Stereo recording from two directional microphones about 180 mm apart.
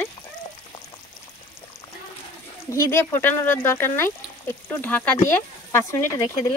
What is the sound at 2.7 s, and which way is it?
Speech, 15° left (ahead or behind).